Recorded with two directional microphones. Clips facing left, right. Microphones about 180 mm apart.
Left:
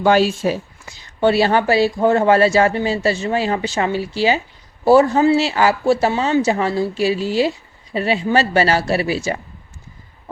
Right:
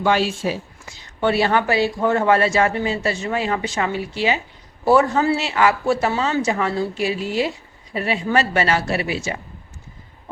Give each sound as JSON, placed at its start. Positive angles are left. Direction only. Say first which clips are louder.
{"t": 0.0, "sound": "speech", "louder": "left 5 dB", "side_deg": 40}
{"t": 1.2, "sound": "speech", "louder": "left 3 dB", "side_deg": 30}